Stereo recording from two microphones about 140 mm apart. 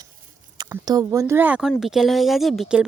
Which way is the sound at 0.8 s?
25° right (ahead or behind).